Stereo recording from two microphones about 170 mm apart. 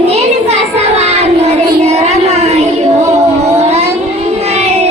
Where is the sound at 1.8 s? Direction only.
40° right (ahead or behind).